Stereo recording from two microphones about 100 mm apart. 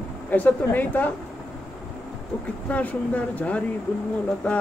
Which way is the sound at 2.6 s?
15° left (ahead or behind).